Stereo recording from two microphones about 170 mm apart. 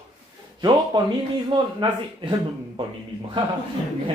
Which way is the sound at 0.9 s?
25° right (ahead or behind).